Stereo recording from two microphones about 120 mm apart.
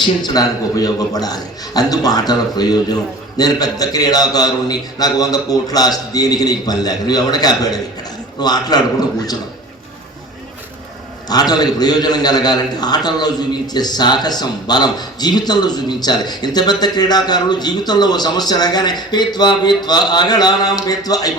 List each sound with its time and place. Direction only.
0.0 s a man's voice: 35° left (ahead or behind)
11.3 s a man's voice: 35° left (ahead or behind)